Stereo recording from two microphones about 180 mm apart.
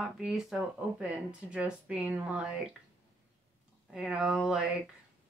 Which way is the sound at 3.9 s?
5° right (ahead or behind).